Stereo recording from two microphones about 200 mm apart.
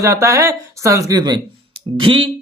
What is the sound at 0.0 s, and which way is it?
Speech, 15° right (ahead or behind).